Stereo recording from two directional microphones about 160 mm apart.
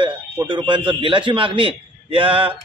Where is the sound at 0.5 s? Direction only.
30° right (ahead or behind).